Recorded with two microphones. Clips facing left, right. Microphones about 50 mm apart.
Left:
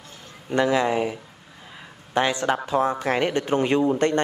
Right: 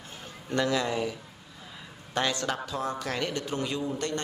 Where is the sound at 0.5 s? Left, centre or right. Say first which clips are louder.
Left 7 dB; left.